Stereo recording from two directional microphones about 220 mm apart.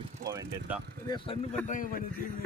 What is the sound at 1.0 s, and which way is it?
Speech, 20° left (ahead or behind).